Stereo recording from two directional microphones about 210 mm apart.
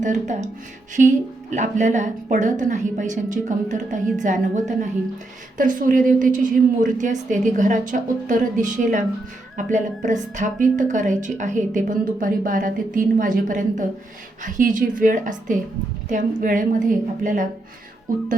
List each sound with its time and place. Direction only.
0.0 s a woman's voice: 35° right (ahead or behind)